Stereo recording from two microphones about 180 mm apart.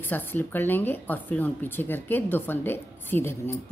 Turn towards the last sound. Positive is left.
turn(degrees=10)  # may be behind; listen again after turning